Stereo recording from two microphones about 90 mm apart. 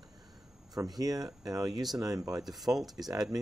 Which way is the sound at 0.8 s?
45° right (ahead or behind).